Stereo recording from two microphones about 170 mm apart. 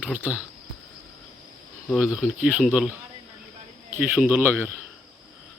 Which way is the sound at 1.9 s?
5° right (ahead or behind).